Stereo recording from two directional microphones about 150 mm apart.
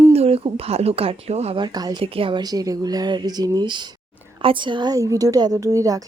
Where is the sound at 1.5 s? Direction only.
30° right (ahead or behind).